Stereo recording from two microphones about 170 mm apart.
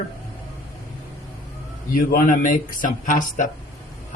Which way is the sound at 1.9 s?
55° left (ahead or behind).